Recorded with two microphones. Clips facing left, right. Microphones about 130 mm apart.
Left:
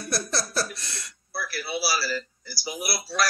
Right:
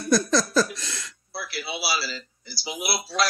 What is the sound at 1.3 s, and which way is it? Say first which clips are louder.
Speech: left 2 dB; 20° right (ahead or behind).